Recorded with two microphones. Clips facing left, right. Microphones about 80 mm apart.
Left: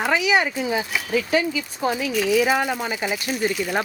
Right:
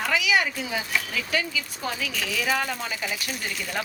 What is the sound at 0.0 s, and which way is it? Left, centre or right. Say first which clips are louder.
Speech: left 4 dB; left.